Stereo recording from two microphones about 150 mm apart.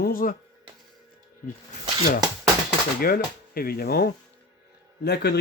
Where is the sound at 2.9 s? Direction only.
90° left.